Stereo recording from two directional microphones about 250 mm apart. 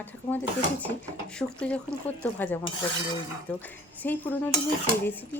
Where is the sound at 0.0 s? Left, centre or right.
Centre.